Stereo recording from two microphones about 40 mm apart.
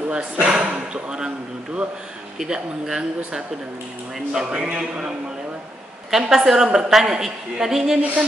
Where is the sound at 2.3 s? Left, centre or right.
Centre.